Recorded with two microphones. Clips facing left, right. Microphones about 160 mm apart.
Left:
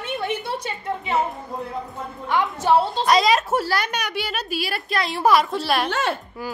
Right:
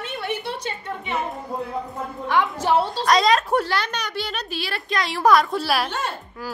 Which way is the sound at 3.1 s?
5° left (ahead or behind).